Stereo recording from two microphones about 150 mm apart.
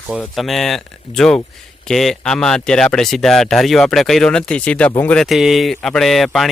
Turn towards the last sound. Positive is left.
turn(degrees=0)  # may be behind; listen again after turning